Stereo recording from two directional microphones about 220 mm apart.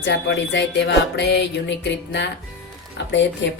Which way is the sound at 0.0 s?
50° left (ahead or behind).